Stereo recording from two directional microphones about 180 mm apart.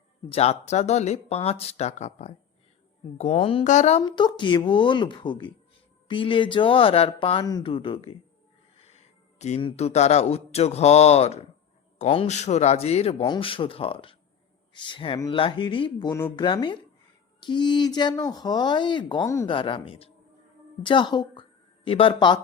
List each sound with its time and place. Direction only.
0.3 s speech: 35° left (ahead or behind)
4.0 s a man's voice: 25° left (ahead or behind)
19.5 s speech: 30° left (ahead or behind)